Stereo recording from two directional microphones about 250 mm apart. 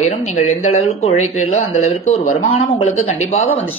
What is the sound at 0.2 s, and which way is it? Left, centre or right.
Speech, left.